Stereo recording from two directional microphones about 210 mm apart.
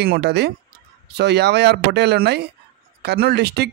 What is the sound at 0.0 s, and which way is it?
Speech, 50° right (ahead or behind).